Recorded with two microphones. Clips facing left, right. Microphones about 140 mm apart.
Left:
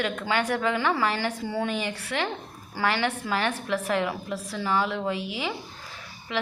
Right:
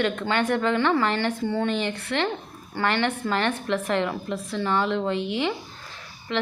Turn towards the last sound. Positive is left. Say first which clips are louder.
# right 3 dB
turn(degrees=5)  # may be behind; listen again after turning